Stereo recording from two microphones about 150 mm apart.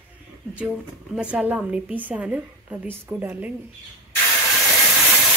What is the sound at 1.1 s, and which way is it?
A woman's voice, 10° right (ahead or behind).